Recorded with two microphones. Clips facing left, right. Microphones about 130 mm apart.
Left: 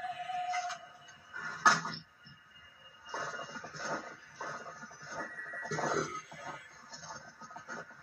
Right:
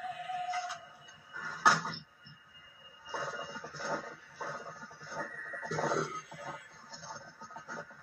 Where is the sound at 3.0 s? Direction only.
15° right (ahead or behind).